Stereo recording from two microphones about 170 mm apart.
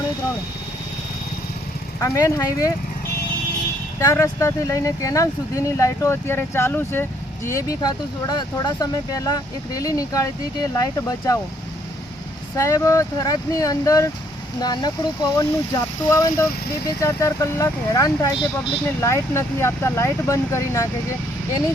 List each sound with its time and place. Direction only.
2.0 s speech: 20° left (ahead or behind)
4.0 s speech: 15° left (ahead or behind)
12.5 s speech: 20° left (ahead or behind)
18.9 s speech: 15° left (ahead or behind)